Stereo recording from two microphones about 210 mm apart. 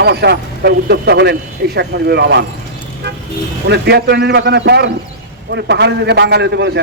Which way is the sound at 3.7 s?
50° right (ahead or behind).